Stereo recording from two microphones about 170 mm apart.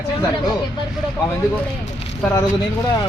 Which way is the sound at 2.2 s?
20° left (ahead or behind).